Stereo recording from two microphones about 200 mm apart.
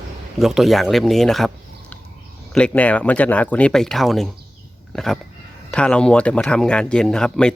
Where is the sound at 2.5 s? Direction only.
5° left (ahead or behind).